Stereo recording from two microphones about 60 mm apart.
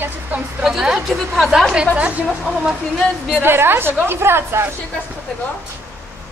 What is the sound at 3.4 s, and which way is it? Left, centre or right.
A woman's voice, right.